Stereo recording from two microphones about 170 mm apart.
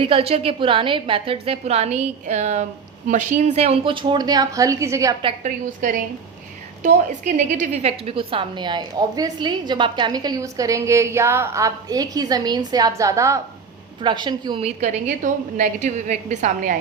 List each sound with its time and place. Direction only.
0.0 s a woman's voice: 35° right (ahead or behind); by 5.1 s 20° right (ahead or behind)
5.4 s a woman's voice: 50° right (ahead or behind); by 14.7 s 30° right (ahead or behind)
14.8 s a woman's voice: 45° right (ahead or behind)